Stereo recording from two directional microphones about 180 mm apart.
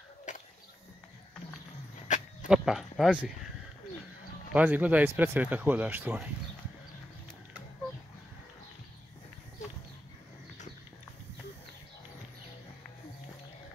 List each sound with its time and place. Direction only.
0.3 s a sound: 45° left (ahead or behind)
2.1 s dog: 45° left (ahead or behind)
2.4 s speech: 5° right (ahead or behind)
4.5 s speech: 10° right (ahead or behind)